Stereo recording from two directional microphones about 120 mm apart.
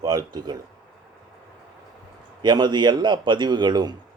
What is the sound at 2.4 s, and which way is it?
A man's voice, 40° right (ahead or behind).